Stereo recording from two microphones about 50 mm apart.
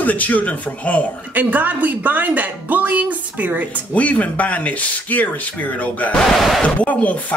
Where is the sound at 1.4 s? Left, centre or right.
Right.